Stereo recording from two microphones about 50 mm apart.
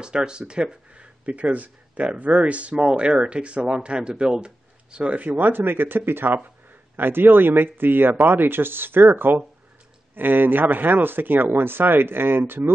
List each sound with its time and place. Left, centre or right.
0.0 s speech: centre
4.9 s speech: right